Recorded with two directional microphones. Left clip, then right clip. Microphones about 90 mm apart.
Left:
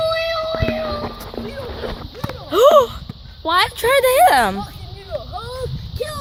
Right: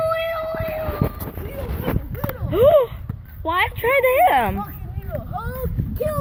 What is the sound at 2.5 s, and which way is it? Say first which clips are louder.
Speech: left 3 dB; 70° left (ahead or behind).